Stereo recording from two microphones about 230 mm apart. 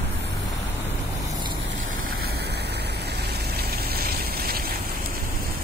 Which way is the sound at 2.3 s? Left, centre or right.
Right.